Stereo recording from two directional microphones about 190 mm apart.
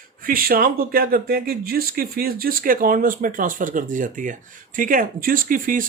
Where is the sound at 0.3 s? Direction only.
50° right (ahead or behind).